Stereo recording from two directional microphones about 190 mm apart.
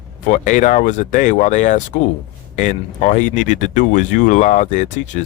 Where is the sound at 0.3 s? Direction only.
40° left (ahead or behind).